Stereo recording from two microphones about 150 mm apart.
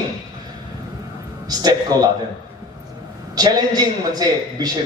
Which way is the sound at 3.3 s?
25° right (ahead or behind).